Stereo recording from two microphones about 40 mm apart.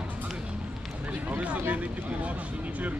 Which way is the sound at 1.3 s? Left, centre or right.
Right.